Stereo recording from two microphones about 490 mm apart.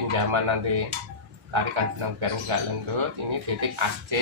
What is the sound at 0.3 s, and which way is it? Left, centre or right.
Speech, right.